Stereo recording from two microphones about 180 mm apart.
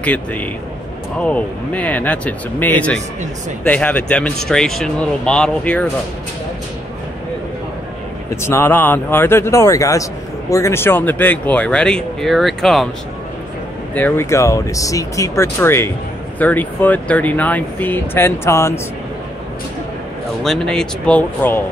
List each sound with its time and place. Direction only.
0.0 s speech: 10° left (ahead or behind)
8.4 s speech: 15° left (ahead or behind)
13.9 s speech: 10° left (ahead or behind)
20.4 s speech: 5° left (ahead or behind)